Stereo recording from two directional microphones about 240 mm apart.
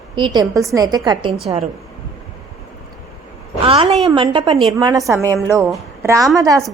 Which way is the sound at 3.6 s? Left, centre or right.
Right.